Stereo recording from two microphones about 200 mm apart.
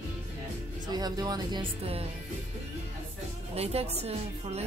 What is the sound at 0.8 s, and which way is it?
Speech, 20° right (ahead or behind).